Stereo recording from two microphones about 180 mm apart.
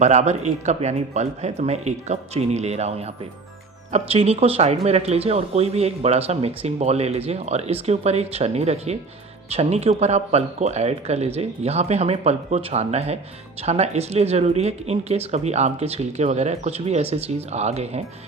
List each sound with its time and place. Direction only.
0.0 s speech: 40° right (ahead or behind)
3.9 s speech: 35° right (ahead or behind)